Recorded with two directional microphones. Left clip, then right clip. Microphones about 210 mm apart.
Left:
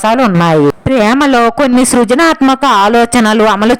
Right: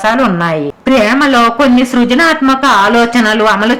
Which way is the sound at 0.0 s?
40° left (ahead or behind).